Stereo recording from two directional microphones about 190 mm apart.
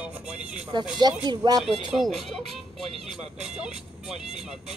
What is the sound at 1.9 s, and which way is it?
Speech, centre (ahead or behind).